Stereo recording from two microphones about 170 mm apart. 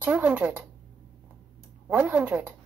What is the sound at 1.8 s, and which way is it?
Speech, 10° right (ahead or behind).